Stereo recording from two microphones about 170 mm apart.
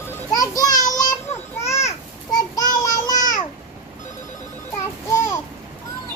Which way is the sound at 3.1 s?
50° left (ahead or behind).